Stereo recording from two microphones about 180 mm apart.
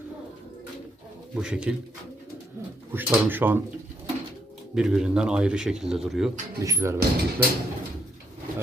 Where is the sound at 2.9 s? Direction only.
10° right (ahead or behind).